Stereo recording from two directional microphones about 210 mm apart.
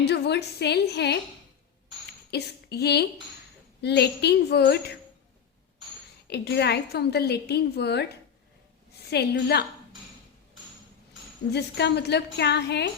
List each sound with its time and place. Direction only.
0.0 s a woman's voice: 55° left (ahead or behind)
2.3 s a woman's voice: 50° left (ahead or behind)
6.2 s a woman's voice: 50° left (ahead or behind)
11.5 s a woman's voice: 55° left (ahead or behind)